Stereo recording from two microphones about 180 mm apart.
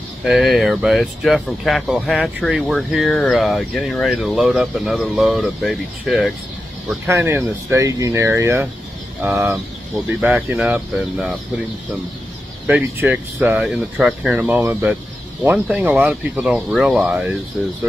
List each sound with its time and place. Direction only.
0.2 s speech: centre (ahead or behind)
7.1 s speech: 15° right (ahead or behind)
12.6 s speech: 10° right (ahead or behind)